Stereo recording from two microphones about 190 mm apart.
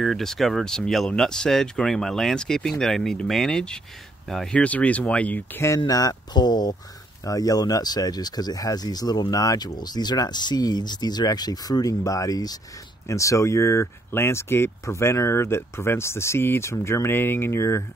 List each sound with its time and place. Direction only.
0.0 s speech: centre (ahead or behind)